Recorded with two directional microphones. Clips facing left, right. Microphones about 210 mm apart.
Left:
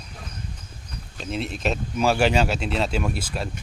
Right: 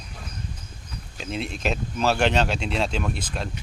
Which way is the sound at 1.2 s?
Centre (ahead or behind).